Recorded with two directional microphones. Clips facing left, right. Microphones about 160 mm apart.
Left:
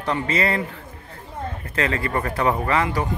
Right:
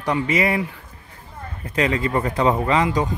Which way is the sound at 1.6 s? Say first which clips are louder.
Right 4 dB; 15° right (ahead or behind).